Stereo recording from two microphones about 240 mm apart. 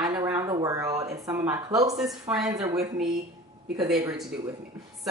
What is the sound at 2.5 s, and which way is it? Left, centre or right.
Speech, centre.